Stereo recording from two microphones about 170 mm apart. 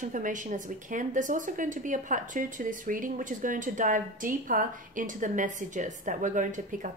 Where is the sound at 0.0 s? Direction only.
50° right (ahead or behind).